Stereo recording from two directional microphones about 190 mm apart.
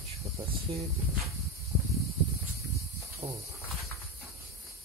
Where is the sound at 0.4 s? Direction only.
30° right (ahead or behind).